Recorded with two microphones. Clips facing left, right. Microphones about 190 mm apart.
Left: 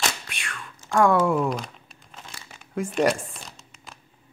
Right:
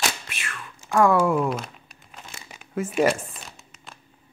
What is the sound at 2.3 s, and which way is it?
Crumpling, 15° right (ahead or behind).